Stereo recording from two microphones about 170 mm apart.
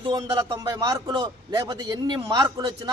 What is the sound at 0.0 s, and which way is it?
A man's voice, 25° right (ahead or behind).